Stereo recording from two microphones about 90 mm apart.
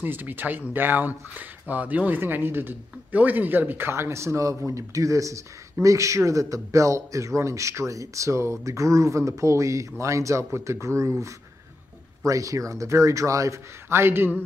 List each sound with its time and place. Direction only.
0.0 s speech: 20° right (ahead or behind)